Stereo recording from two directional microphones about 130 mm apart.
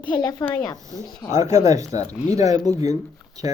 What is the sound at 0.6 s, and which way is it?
Speech, 30° left (ahead or behind).